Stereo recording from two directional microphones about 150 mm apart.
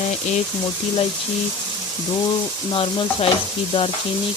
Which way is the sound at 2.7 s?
35° left (ahead or behind).